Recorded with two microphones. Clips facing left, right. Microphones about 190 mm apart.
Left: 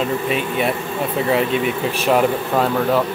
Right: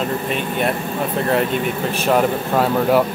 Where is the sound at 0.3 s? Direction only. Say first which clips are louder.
Left 1 dB; 5° left (ahead or behind).